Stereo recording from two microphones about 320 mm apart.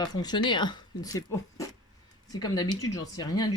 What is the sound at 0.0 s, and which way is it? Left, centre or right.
Speech, centre.